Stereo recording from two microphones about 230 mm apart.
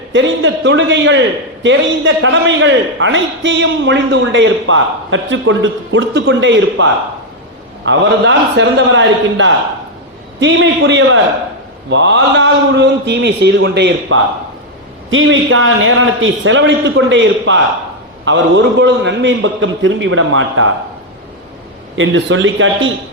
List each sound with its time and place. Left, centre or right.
0.1 s a man's voice: right
7.9 s a man's voice: right
21.9 s a man's voice: right